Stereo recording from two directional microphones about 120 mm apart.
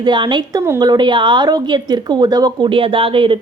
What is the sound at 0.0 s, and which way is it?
A woman's voice, 40° right (ahead or behind).